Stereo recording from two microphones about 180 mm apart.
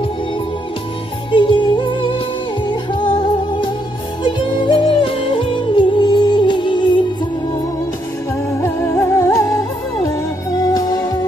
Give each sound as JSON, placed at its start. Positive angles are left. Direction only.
{"t": 1.3, "sound": "music", "side_deg": 25}
{"t": 8.5, "sound": "music", "side_deg": 15}